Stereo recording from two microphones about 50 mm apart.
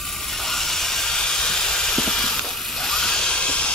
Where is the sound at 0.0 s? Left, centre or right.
Centre.